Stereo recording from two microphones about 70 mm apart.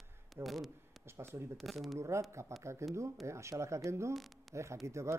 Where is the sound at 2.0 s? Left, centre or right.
Right.